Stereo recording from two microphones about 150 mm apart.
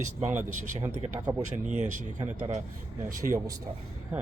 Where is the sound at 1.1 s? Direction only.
20° right (ahead or behind).